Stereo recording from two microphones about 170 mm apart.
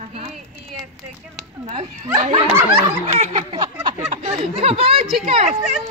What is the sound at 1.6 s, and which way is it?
Speech, 35° right (ahead or behind).